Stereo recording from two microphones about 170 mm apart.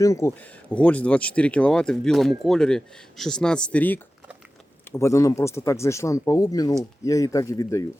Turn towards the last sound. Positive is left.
turn(degrees=20)  # may be behind; listen again after turning